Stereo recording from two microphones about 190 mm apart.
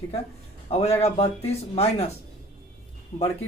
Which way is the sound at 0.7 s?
35° left (ahead or behind).